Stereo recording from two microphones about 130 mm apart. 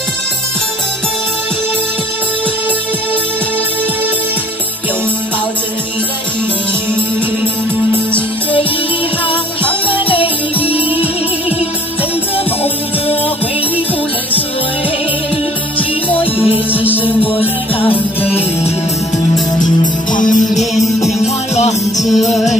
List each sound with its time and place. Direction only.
9.8 s music: 40° left (ahead or behind)
16.3 s music: 10° right (ahead or behind)
17.0 s music: 45° left (ahead or behind)
19.6 s music: 80° left
21.0 s music: 60° left (ahead or behind)
22.0 s music: centre (ahead or behind)